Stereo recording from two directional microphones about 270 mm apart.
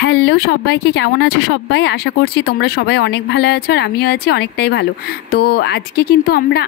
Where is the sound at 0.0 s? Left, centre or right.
Left.